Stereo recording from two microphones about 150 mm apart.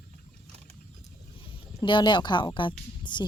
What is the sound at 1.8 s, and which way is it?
Speech, 30° left (ahead or behind).